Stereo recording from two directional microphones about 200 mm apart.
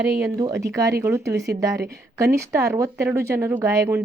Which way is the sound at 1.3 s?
55° right (ahead or behind).